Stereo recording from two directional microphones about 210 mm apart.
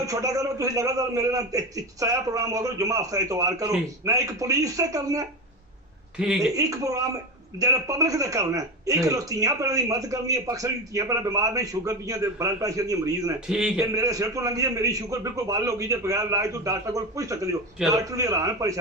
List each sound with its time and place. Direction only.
0.0 s a man's voice: 15° right (ahead or behind)
6.1 s speech: 5° right (ahead or behind)
6.6 s a man's voice: 15° right (ahead or behind)
13.5 s speech: 5° right (ahead or behind)
13.9 s a man's voice: 15° right (ahead or behind)